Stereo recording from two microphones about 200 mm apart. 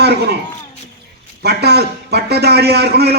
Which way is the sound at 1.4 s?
55° right (ahead or behind).